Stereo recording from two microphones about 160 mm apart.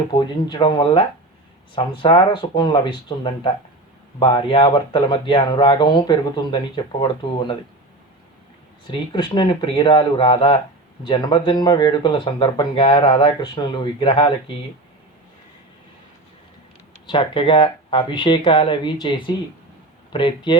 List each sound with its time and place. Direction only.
0.1 s speech: 25° left (ahead or behind)
8.9 s speech: 30° left (ahead or behind)
17.1 s speech: 30° left (ahead or behind)